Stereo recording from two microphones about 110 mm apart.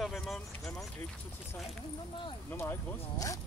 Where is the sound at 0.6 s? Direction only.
25° left (ahead or behind).